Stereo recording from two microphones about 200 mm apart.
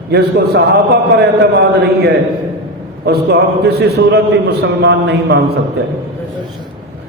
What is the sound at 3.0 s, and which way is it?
A man's voice, 55° right (ahead or behind).